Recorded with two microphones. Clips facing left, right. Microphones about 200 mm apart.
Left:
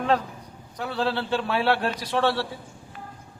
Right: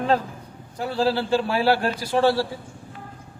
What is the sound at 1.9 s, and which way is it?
Speech, 30° right (ahead or behind).